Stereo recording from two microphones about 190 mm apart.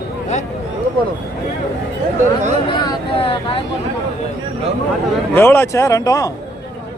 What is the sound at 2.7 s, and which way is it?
Vehicle, 30° left (ahead or behind).